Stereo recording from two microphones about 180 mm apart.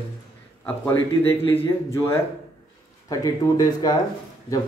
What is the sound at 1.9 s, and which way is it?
A man's voice, 15° left (ahead or behind).